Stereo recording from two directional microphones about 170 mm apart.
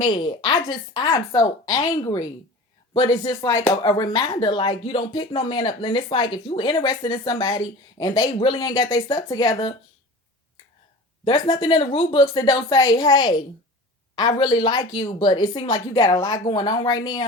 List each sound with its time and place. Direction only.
0.0 s speech: 25° left (ahead or behind)
11.4 s speech: 25° left (ahead or behind)